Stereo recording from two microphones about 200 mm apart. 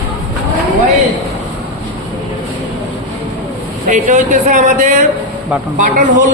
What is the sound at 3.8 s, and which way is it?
Speech, 40° right (ahead or behind).